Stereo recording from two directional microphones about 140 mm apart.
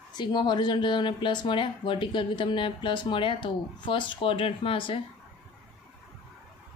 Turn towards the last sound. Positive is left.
turn(degrees=40)  # may be behind; listen again after turning